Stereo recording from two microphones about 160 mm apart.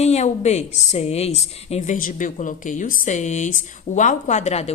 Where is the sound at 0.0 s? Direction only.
45° left (ahead or behind).